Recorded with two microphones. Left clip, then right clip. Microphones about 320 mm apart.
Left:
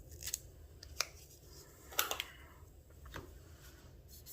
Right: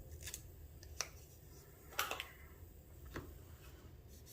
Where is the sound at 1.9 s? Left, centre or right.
Left.